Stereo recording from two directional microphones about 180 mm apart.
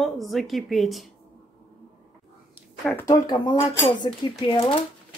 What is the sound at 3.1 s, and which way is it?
Speech, 25° left (ahead or behind).